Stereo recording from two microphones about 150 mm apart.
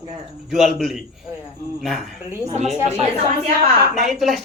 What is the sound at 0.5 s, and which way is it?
Speech, centre (ahead or behind).